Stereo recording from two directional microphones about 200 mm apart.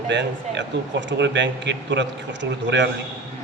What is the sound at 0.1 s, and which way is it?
Speech, 60° right (ahead or behind).